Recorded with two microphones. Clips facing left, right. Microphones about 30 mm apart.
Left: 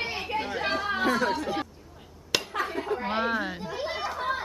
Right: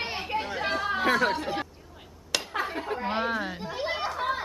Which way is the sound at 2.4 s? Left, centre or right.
Centre.